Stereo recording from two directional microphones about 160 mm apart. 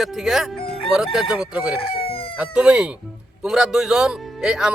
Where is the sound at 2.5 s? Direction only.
5° right (ahead or behind).